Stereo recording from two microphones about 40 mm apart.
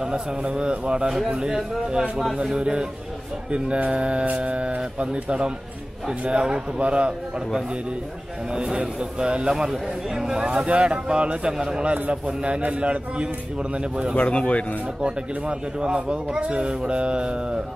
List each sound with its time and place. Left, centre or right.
0.0 s a man's voice: right
8.5 s a man's voice: right
9.5 s a man's voice: centre
10.4 s a man's voice: right
14.1 s speech: left
15.0 s a man's voice: right